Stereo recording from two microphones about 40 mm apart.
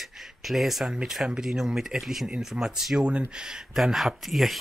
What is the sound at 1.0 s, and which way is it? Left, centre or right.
Speech, centre.